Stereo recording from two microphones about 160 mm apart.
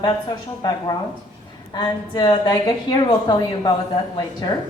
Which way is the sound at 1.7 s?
25° left (ahead or behind).